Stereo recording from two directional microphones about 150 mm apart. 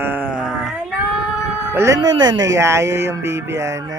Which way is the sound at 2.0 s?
30° right (ahead or behind).